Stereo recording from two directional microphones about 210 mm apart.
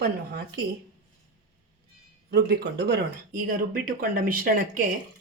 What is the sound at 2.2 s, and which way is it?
Speech, 50° right (ahead or behind).